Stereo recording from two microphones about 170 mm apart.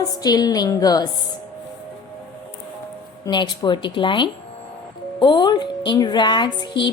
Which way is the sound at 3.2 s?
25° left (ahead or behind).